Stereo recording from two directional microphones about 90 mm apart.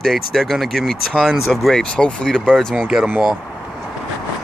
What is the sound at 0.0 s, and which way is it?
Speech, centre (ahead or behind).